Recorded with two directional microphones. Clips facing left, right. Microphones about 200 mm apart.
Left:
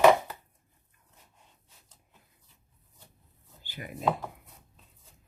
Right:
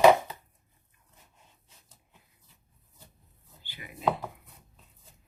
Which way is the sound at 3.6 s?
45° left (ahead or behind).